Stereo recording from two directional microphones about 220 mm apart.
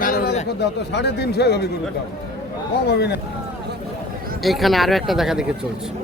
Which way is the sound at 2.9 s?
50° left (ahead or behind).